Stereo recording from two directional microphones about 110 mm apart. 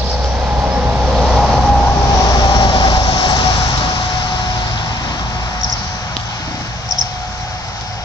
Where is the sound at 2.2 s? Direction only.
35° left (ahead or behind).